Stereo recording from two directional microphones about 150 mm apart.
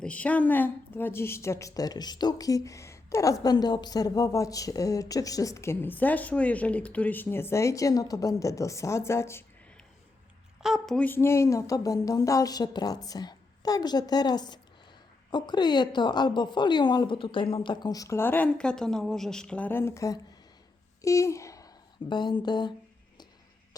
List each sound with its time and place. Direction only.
0.0 s a woman's voice: 10° left (ahead or behind)
10.6 s a woman's voice: centre (ahead or behind); by 21.7 s 20° left (ahead or behind)
22.1 s speech: 30° left (ahead or behind)